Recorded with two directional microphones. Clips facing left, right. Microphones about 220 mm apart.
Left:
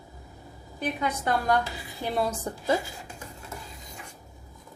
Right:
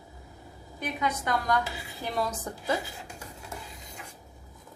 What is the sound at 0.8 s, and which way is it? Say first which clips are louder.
A woman's voice: left 2 dB; 30° left (ahead or behind).